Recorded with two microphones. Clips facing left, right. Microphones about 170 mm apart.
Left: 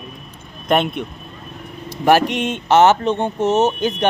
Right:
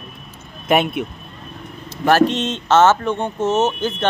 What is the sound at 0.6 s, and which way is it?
Speech, 5° right (ahead or behind).